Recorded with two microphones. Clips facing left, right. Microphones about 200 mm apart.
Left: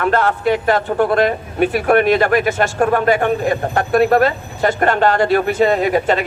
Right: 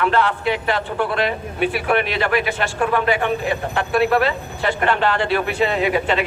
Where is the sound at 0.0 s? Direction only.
45° left (ahead or behind).